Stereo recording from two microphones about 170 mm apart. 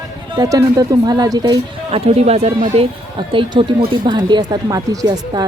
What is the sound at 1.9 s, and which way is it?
Speech, 35° right (ahead or behind).